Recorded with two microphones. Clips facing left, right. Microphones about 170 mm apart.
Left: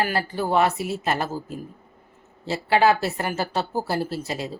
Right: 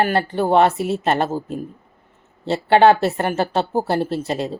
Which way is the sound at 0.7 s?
55° right (ahead or behind).